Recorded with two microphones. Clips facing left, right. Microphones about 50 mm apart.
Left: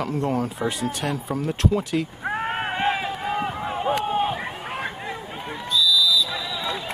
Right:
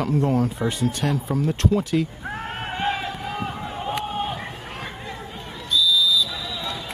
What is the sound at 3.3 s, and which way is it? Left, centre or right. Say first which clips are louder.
Chop: left 3 dB; left.